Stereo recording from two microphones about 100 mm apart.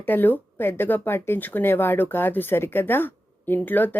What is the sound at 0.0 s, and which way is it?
Speech, 20° left (ahead or behind).